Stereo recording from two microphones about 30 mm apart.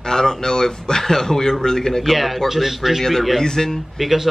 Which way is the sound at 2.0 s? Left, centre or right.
Centre.